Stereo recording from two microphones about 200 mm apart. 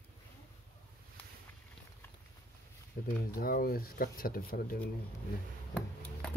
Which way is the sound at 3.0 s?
50° left (ahead or behind).